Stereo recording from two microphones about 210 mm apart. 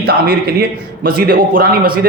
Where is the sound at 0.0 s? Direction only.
50° right (ahead or behind).